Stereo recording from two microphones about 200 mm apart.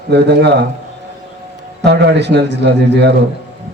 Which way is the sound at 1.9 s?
60° right (ahead or behind).